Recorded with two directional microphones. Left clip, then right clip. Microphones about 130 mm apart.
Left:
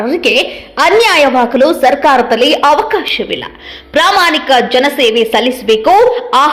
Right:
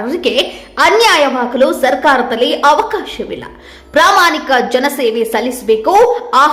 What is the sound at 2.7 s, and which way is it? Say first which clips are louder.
A woman's voice: left 4 dB; 20° left (ahead or behind).